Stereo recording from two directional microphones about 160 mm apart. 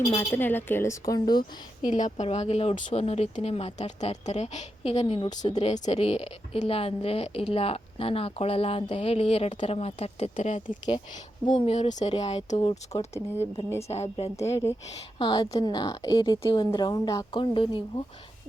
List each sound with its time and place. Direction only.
0.2 s a woman's voice: 15° left (ahead or behind)
1.9 s a woman's voice: 50° left (ahead or behind)
5.5 s a woman's voice: 45° left (ahead or behind)
13.1 s speech: 15° right (ahead or behind)
13.8 s a woman's voice: 40° left (ahead or behind)
14.3 s a woman's voice: 20° left (ahead or behind)